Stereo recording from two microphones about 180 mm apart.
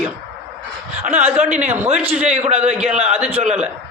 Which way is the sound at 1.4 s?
10° right (ahead or behind).